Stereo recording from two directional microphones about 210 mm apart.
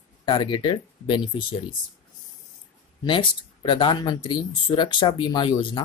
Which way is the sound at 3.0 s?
25° left (ahead or behind).